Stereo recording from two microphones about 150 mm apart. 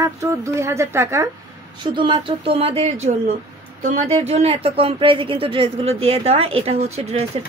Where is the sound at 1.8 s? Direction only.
30° right (ahead or behind).